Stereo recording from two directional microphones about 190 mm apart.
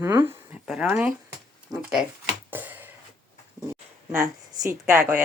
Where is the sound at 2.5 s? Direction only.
10° right (ahead or behind).